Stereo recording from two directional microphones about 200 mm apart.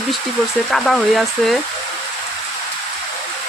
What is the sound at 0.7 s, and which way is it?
Speech, centre (ahead or behind).